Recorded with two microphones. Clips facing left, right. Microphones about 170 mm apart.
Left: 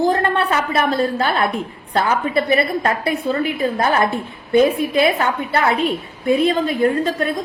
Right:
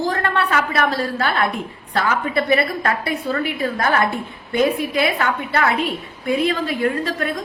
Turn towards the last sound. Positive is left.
turn(degrees=25)  # may be behind; listen again after turning